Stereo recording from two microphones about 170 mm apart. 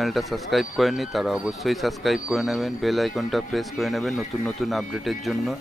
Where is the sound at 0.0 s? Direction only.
Centre (ahead or behind).